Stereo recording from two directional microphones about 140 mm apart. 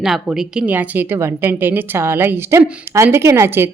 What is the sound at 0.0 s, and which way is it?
A woman's voice, 5° right (ahead or behind).